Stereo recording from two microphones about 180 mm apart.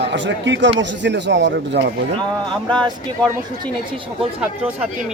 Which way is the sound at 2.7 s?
25° right (ahead or behind).